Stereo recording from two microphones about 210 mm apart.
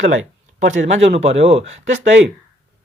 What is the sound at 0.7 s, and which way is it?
Speech, 35° right (ahead or behind).